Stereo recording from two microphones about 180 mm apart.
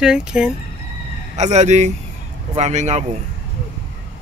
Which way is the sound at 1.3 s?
40° right (ahead or behind).